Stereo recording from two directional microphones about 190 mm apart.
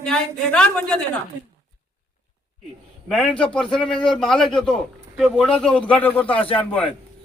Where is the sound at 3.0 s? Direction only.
5° left (ahead or behind).